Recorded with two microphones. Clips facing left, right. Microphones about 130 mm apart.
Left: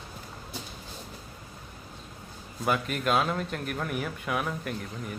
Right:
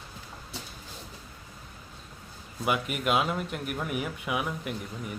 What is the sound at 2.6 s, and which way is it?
A man's voice, 10° right (ahead or behind).